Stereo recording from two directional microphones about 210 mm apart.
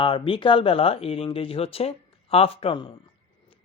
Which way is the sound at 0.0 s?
25° left (ahead or behind).